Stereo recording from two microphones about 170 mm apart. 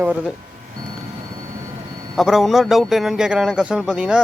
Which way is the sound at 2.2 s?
Centre (ahead or behind).